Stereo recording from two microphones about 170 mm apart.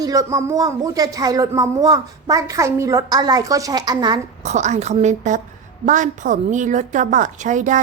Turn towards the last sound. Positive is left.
turn(degrees=-45)  # may be behind; listen again after turning